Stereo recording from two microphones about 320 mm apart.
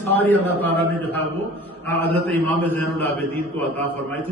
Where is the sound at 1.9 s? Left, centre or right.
Centre.